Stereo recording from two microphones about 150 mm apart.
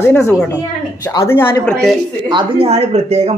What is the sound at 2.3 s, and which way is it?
Speech, 35° right (ahead or behind).